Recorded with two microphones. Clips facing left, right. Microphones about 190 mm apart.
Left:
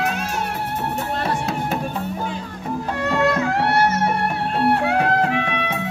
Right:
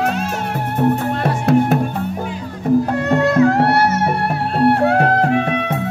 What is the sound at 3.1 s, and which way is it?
Music, 50° right (ahead or behind).